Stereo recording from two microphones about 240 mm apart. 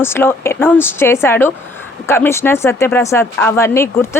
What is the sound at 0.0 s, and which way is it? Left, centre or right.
Speech, centre.